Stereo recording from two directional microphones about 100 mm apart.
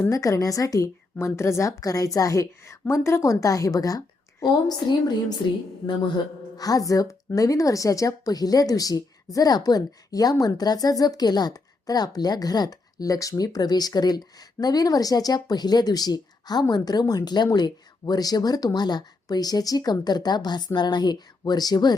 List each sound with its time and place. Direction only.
0.1 s a woman's voice: 35° left (ahead or behind)
6.6 s a woman's voice: 35° left (ahead or behind)